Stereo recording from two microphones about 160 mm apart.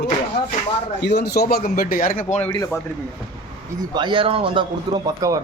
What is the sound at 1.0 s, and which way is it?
Speech, 85° left.